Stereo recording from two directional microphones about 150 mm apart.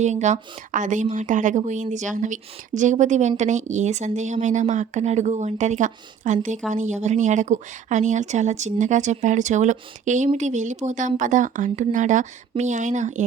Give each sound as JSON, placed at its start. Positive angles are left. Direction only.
{"t": 0.0, "sound": "a woman's voice", "side_deg": -50}